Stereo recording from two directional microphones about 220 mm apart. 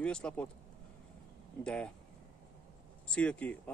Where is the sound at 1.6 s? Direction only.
5° left (ahead or behind).